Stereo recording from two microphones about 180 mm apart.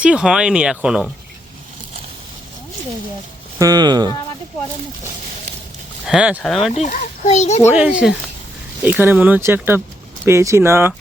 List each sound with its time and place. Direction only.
0.0 s speech: 5° right (ahead or behind)
3.6 s speech: 20° right (ahead or behind)
6.1 s speech: 5° right (ahead or behind)
6.7 s a child's voice: 40° left (ahead or behind)
7.7 s speech: 5° right (ahead or behind)